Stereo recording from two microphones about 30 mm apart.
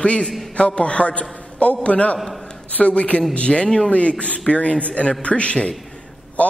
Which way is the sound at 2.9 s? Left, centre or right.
Left.